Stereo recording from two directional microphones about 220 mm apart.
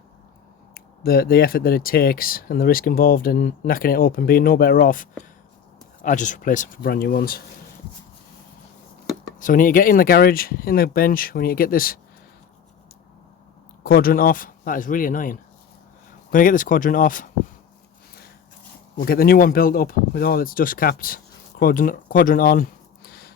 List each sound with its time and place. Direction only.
0.7 s speech: 45° left (ahead or behind)
9.4 s speech: 40° left (ahead or behind)
13.8 s speech: 40° left (ahead or behind)
18.9 s speech: 45° left (ahead or behind)